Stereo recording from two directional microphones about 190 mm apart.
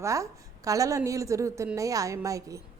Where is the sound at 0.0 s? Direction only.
15° right (ahead or behind).